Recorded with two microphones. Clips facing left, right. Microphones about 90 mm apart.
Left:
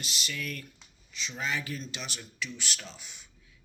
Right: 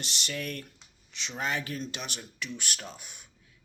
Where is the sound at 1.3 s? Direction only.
50° right (ahead or behind).